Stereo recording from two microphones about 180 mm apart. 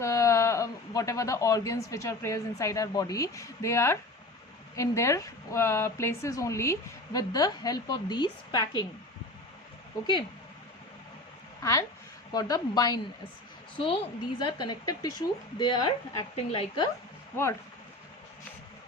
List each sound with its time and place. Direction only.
0.0 s speech: 15° left (ahead or behind)
11.6 s a woman's voice: 15° left (ahead or behind)